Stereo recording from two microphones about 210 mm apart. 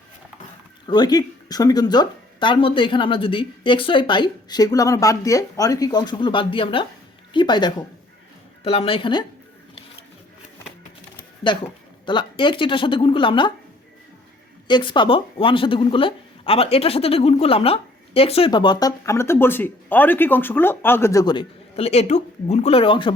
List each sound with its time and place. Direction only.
0.9 s a woman's voice: 20° left (ahead or behind)
11.5 s a woman's voice: 20° left (ahead or behind)
14.7 s a woman's voice: 20° left (ahead or behind)